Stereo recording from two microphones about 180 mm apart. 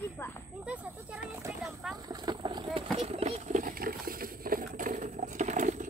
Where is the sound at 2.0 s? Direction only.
20° right (ahead or behind).